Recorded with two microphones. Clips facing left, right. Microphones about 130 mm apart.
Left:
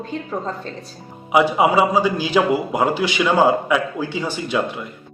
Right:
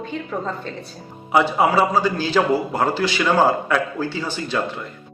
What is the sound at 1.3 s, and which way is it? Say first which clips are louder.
Speech: left 2 dB; 10° left (ahead or behind).